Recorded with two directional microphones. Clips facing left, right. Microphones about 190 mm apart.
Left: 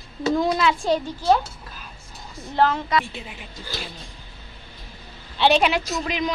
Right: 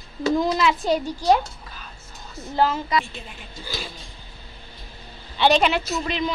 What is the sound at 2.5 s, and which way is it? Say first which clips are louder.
Speech: left 1 dB; 5° right (ahead or behind).